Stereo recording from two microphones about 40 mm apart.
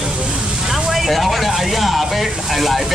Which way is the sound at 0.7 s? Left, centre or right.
Centre.